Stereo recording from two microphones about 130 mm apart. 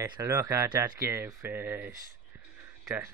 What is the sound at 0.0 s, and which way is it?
Speech, 25° right (ahead or behind).